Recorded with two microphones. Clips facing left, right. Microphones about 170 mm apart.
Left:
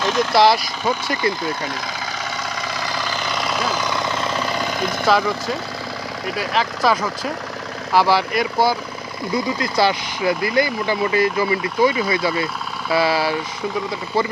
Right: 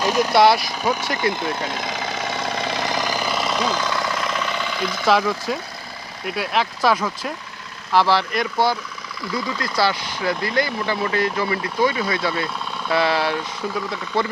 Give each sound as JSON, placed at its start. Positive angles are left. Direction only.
{"t": 0.0, "sound": "speech", "side_deg": -10}
{"t": 0.3, "sound": "speech", "side_deg": 0}
{"t": 2.6, "sound": "vehicle", "side_deg": -20}
{"t": 5.0, "sound": "speech", "side_deg": 0}
{"t": 7.9, "sound": "speech", "side_deg": 10}